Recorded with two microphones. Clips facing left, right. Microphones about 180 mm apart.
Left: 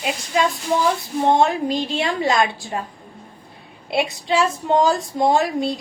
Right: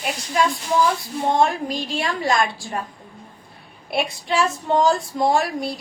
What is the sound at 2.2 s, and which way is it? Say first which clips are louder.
Speech: left 1 dB; 20° left (ahead or behind).